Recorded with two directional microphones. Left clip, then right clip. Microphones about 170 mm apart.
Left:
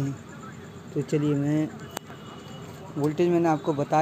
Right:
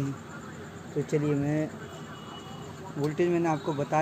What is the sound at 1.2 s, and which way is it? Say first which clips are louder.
Speech: left 5 dB; 30° left (ahead or behind).